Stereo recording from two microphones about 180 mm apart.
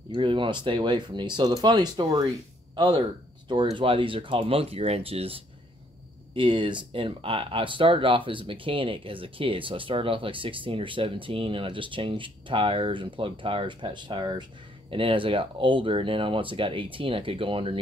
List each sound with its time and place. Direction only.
0.1 s speech: 30° right (ahead or behind)